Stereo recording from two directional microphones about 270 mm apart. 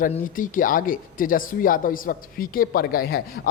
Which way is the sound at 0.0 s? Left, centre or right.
Left.